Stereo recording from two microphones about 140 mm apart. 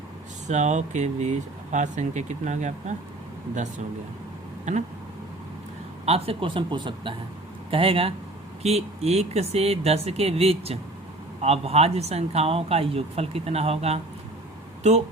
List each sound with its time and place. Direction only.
0.4 s speech: 55° right (ahead or behind)
4.7 s speech: 60° right (ahead or behind)
6.1 s speech: 45° right (ahead or behind)